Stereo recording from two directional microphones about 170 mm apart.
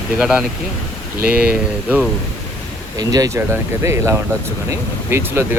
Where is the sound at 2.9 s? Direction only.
20° right (ahead or behind).